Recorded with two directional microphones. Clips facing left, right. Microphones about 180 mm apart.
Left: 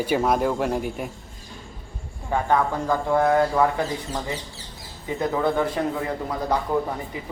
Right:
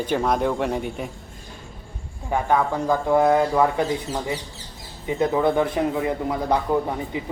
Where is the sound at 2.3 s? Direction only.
10° right (ahead or behind).